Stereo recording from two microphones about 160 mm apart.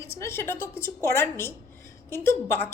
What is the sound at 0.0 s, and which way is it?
A woman's voice, 15° left (ahead or behind).